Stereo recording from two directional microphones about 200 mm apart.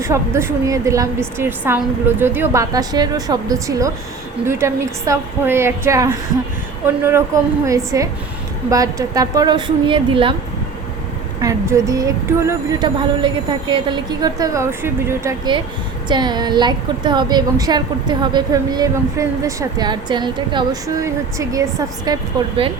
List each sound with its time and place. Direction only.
0.0 s a woman's voice: 15° right (ahead or behind)
11.3 s a woman's voice: 15° right (ahead or behind)